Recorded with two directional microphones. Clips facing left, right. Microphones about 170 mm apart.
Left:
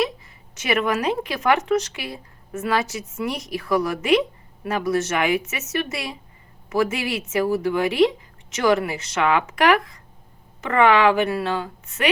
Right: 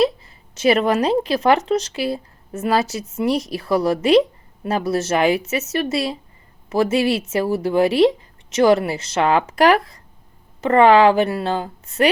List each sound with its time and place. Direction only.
0.5 s speech: 30° right (ahead or behind)